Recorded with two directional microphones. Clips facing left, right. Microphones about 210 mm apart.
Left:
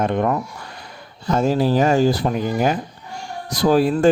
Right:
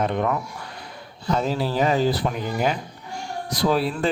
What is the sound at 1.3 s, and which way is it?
Speech, 45° left (ahead or behind).